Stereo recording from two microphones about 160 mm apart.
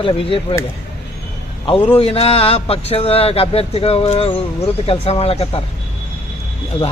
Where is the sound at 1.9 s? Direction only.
35° left (ahead or behind).